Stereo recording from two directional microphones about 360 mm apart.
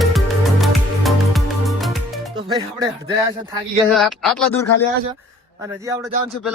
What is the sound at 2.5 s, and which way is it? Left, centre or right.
Music, centre.